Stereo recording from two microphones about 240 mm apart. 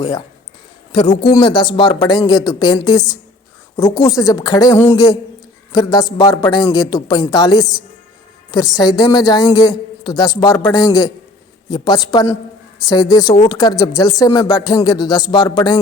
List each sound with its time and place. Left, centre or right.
0.9 s a woman's voice: centre
12.1 s a woman's voice: centre